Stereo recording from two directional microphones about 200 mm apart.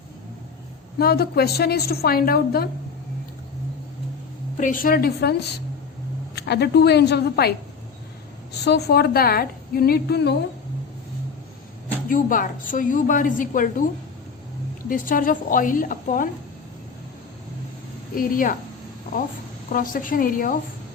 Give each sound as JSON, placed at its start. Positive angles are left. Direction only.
{"t": 0.9, "sound": "a woman's voice", "side_deg": 50}
{"t": 4.5, "sound": "a woman's voice", "side_deg": 40}
{"t": 8.6, "sound": "a woman's voice", "side_deg": 55}
{"t": 12.0, "sound": "a woman's voice", "side_deg": 45}
{"t": 14.8, "sound": "a woman's voice", "side_deg": 45}
{"t": 18.1, "sound": "a woman's voice", "side_deg": 45}
{"t": 19.7, "sound": "a woman's voice", "side_deg": 45}